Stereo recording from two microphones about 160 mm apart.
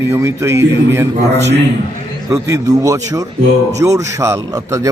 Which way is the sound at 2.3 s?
20° right (ahead or behind).